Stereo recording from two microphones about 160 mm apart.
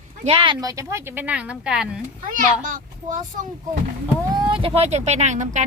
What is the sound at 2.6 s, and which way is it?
Speech, 55° right (ahead or behind).